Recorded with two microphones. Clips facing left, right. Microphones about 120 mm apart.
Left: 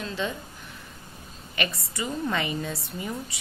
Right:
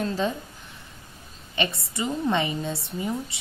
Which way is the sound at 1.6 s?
25° right (ahead or behind).